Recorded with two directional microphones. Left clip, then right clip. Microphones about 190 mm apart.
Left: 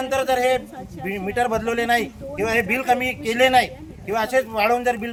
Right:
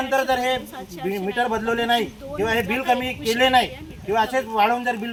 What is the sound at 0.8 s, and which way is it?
Speech, 35° left (ahead or behind).